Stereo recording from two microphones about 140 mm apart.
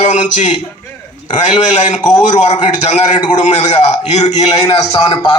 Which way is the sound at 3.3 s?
60° left (ahead or behind).